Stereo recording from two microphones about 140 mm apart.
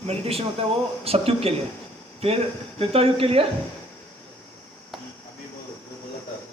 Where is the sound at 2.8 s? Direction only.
45° right (ahead or behind).